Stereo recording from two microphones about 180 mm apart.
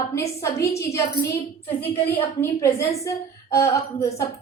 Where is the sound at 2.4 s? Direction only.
15° left (ahead or behind).